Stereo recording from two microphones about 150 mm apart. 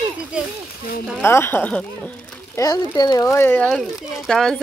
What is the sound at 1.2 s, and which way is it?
Speech, 15° left (ahead or behind).